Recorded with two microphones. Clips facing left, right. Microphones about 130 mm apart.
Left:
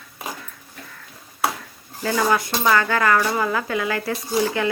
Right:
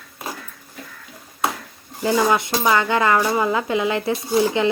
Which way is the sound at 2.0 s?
20° right (ahead or behind).